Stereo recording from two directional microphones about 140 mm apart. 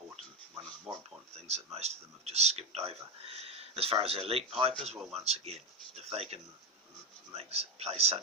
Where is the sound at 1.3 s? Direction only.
50° right (ahead or behind).